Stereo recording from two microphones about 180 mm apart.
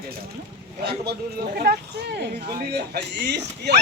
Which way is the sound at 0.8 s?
65° right (ahead or behind).